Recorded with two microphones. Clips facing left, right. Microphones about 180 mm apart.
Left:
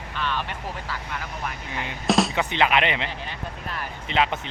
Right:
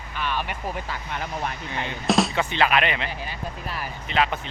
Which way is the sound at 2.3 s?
20° left (ahead or behind).